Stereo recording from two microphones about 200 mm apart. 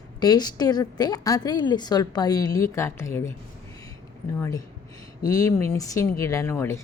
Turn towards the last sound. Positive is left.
turn(degrees=15)  # may be behind; listen again after turning